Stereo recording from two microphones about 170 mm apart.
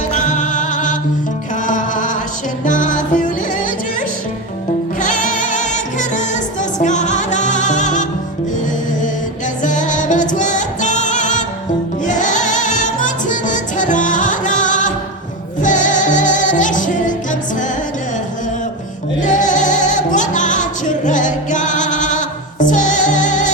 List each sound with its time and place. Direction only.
0.1 s music: 45° left (ahead or behind)
4.9 s music: 45° left (ahead or behind)
9.6 s music: 45° left (ahead or behind)
19.2 s music: 45° left (ahead or behind)